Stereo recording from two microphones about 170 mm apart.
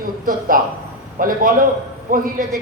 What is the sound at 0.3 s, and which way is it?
A woman's voice, 55° right (ahead or behind).